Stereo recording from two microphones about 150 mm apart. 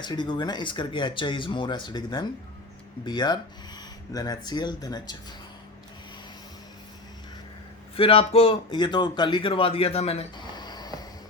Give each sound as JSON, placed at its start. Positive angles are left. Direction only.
{"t": 0.0, "sound": "a man's voice", "side_deg": 30}
{"t": 7.9, "sound": "a man's voice", "side_deg": 40}
{"t": 10.3, "sound": "a sound", "side_deg": 30}